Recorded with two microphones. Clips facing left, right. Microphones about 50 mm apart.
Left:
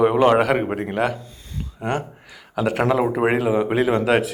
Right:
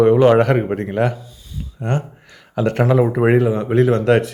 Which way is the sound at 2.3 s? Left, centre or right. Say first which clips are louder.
Right 3 dB; centre.